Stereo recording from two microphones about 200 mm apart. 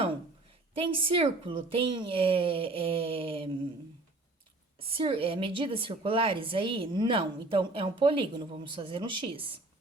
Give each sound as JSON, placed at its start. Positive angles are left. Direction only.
{"t": 0.7, "sound": "a woman's voice", "side_deg": -25}
{"t": 4.8, "sound": "a woman's voice", "side_deg": -30}